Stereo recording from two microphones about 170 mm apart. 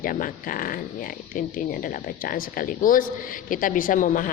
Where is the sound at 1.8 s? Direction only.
55° left (ahead or behind).